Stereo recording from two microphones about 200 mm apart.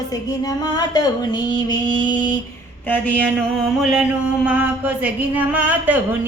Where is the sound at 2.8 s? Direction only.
10° left (ahead or behind).